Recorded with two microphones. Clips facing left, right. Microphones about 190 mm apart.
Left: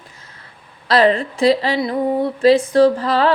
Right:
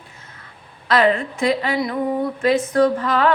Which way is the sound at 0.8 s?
35° left (ahead or behind).